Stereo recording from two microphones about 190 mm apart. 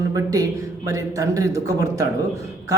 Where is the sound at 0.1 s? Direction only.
20° right (ahead or behind).